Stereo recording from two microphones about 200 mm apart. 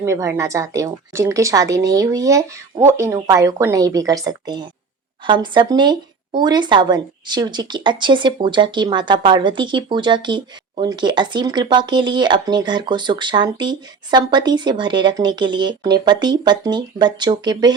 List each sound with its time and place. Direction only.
0.0 s speech: 15° right (ahead or behind)